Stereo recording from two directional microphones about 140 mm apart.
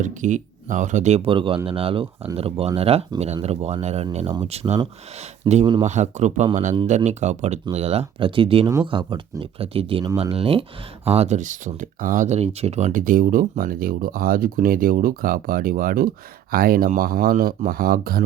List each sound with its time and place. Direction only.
0.0 s speech: 65° right (ahead or behind)
5.5 s speech: 35° right (ahead or behind)
5.8 s speech: 55° right (ahead or behind)
12.9 s speech: 75° right (ahead or behind)